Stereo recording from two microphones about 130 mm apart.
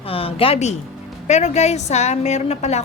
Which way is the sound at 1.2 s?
60° left (ahead or behind).